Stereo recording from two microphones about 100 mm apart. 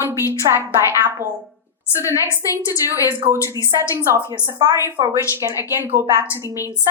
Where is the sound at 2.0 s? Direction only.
30° left (ahead or behind).